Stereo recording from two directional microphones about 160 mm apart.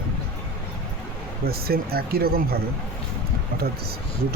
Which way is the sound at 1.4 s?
70° right (ahead or behind).